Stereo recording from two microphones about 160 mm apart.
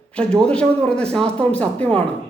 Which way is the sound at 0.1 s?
5° left (ahead or behind).